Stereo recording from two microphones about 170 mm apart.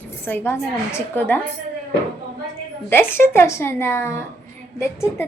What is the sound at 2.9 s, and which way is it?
A woman's voice, 15° left (ahead or behind).